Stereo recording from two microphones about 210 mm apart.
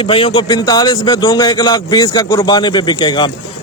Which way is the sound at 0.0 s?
25° left (ahead or behind).